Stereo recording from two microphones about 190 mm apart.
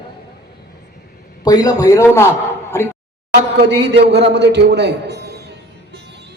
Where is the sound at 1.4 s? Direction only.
20° left (ahead or behind).